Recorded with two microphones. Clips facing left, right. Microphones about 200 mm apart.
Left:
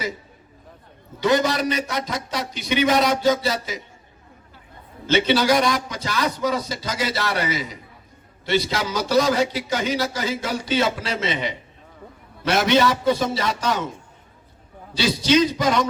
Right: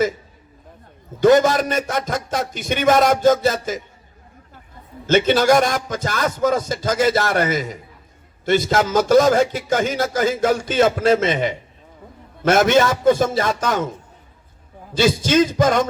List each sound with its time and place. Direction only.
1.2 s a man's voice: 50° right (ahead or behind)
5.0 s a man's voice: 50° right (ahead or behind)
14.9 s a man's voice: 50° right (ahead or behind)